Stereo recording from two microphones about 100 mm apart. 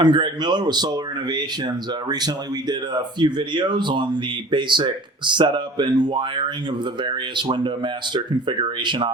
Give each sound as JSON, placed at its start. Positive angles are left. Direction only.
{"t": 0.0, "sound": "speech", "side_deg": -50}